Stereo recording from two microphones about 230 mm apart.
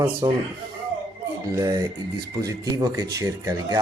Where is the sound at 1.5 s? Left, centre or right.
Centre.